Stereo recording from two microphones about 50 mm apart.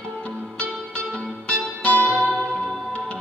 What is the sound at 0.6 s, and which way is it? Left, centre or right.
Music, left.